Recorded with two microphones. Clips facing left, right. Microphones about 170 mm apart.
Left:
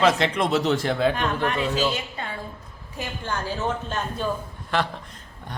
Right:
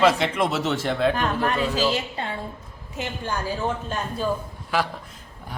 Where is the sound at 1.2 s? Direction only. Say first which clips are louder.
Right 1 dB; 35° right (ahead or behind).